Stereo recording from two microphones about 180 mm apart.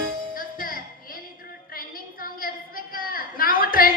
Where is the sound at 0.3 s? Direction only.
50° left (ahead or behind).